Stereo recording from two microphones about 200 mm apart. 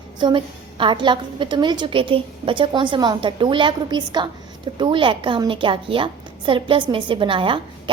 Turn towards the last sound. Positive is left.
turn(degrees=-25)  # may be behind; listen again after turning